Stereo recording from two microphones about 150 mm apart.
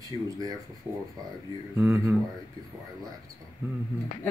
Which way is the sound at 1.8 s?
15° right (ahead or behind).